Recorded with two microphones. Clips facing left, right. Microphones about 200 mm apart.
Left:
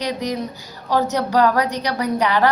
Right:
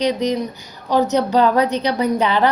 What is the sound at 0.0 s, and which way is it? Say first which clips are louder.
A woman's voice: right 5 dB; 20° right (ahead or behind).